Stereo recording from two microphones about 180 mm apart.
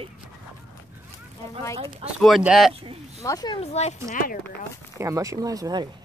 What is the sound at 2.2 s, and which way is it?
Speech, centre (ahead or behind).